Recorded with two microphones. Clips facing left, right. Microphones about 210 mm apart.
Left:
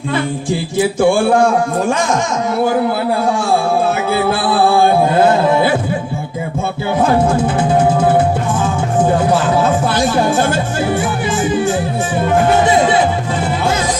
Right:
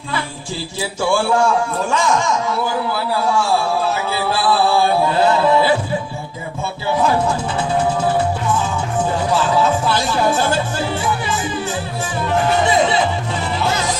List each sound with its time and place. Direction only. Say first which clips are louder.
0.9 s music: left 4 dB; 55° left (ahead or behind)
9.6 s music: left 3 dB; 55° left (ahead or behind)